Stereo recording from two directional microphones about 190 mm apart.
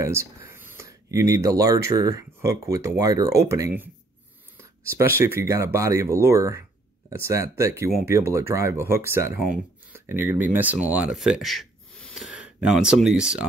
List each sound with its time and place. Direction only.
0.0 s speech: 15° right (ahead or behind)